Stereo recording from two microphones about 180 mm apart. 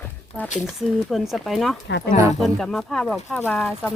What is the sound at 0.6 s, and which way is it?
Speech, centre (ahead or behind).